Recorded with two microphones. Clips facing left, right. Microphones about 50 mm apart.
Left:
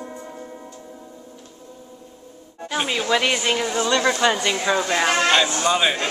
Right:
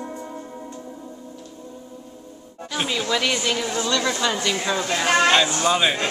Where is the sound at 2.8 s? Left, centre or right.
Centre.